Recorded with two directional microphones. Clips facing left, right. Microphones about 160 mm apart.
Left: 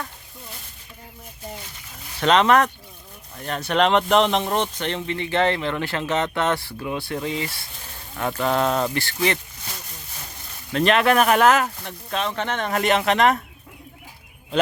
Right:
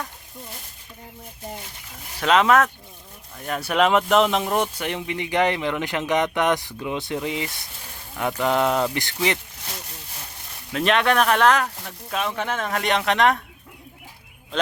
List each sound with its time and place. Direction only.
2.2 s speech: 5° right (ahead or behind)
10.7 s speech: centre (ahead or behind)
12.1 s speech: 10° right (ahead or behind)